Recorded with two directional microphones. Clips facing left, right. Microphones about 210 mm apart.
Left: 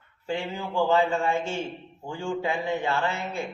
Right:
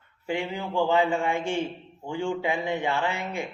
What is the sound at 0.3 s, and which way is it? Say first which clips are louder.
A man's voice: right 1 dB; 15° right (ahead or behind).